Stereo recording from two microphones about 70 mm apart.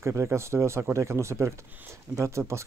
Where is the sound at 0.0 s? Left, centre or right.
Right.